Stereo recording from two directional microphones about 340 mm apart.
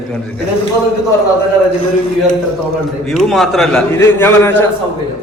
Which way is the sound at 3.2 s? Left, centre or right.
Centre.